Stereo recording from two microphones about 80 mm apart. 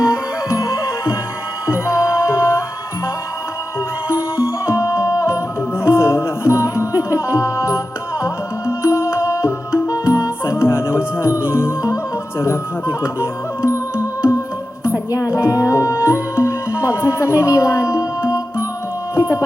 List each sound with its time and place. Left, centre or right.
0.0 s music: left
4.6 s music: left
13.0 s music: centre
13.7 s music: left
19.1 s a sound: left